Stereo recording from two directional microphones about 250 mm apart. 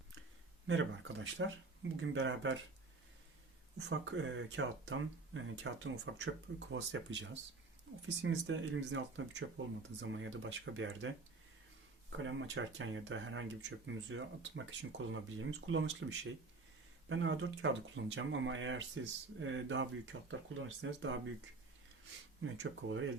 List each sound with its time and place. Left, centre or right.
0.7 s speech: right
3.8 s speech: right
12.1 s speech: right
22.4 s speech: right